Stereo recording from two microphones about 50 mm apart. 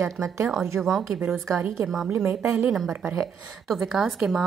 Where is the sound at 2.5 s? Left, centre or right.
Centre.